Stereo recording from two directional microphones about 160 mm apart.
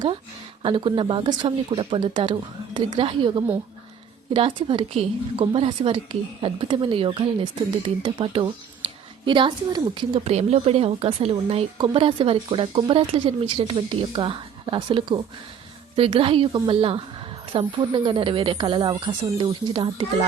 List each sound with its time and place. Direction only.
0.6 s a woman's voice: 30° right (ahead or behind)